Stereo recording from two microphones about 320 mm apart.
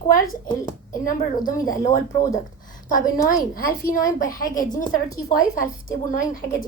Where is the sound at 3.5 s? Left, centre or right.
Left.